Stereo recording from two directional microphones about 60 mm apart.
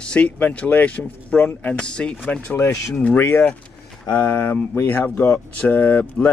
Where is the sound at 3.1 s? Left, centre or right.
Left.